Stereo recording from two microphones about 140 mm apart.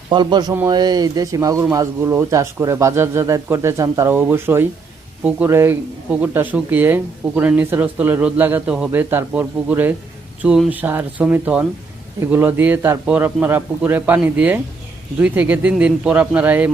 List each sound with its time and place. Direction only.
0.1 s speech: 30° right (ahead or behind); by 16.7 s 10° right (ahead or behind)